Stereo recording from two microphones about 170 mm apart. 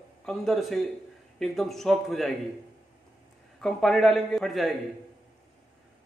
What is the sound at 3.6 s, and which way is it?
A man's voice, centre (ahead or behind).